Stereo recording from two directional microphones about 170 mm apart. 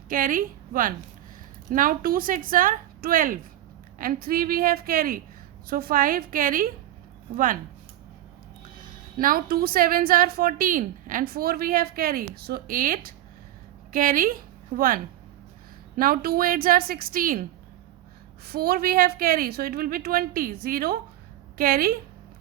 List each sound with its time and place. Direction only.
0.1 s a woman's voice: 55° right (ahead or behind)
9.1 s a woman's voice: 55° right (ahead or behind)
18.4 s a woman's voice: 65° right (ahead or behind)